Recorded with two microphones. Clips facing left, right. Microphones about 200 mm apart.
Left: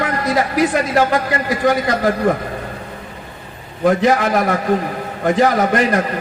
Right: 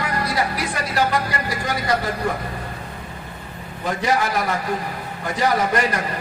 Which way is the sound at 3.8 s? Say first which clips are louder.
Left 8 dB; 50° left (ahead or behind).